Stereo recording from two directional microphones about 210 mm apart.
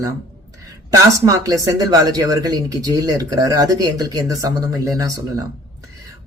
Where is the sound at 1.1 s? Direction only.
15° right (ahead or behind).